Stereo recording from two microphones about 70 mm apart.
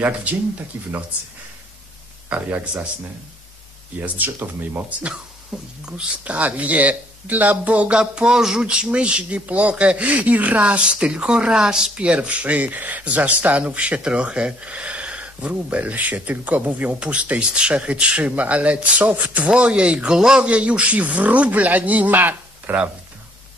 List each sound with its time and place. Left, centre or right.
0.0 s speech: right
2.2 s speech: centre
4.0 s speech: right